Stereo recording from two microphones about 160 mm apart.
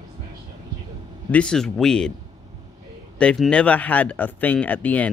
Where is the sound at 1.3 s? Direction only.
5° left (ahead or behind).